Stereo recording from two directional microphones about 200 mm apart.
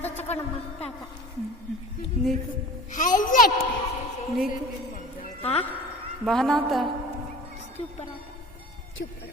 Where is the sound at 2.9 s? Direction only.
40° left (ahead or behind).